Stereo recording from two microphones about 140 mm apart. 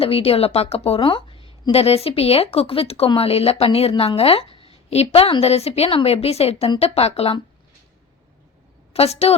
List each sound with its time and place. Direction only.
0.0 s a woman's voice: 45° left (ahead or behind)
8.9 s a woman's voice: 45° left (ahead or behind)